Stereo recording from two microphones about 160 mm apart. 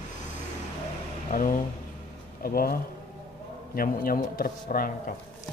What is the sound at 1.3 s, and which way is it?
A man's voice, 60° left (ahead or behind).